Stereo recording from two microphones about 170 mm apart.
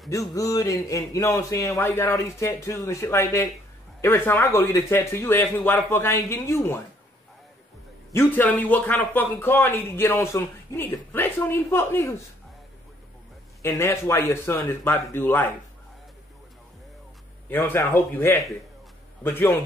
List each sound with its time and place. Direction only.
0.1 s a man's voice: 20° left (ahead or behind)
8.1 s a man's voice: 10° left (ahead or behind)
13.6 s a man's voice: 15° left (ahead or behind)
17.5 s a man's voice: 10° left (ahead or behind)